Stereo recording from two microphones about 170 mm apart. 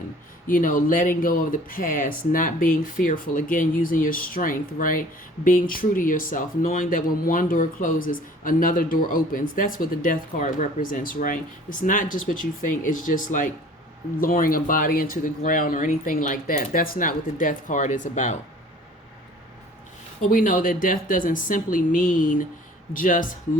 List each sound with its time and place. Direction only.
0.4 s speech: 55° left (ahead or behind)
20.3 s speech: 55° left (ahead or behind)